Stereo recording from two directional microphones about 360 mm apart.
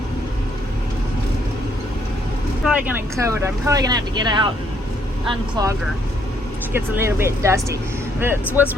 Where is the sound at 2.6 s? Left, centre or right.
Centre.